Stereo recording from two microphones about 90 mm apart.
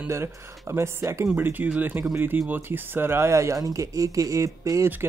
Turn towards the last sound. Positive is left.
turn(degrees=-35)  # may be behind; listen again after turning